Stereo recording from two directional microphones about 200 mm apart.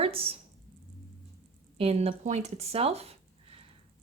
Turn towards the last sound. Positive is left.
turn(degrees=-30)  # may be behind; listen again after turning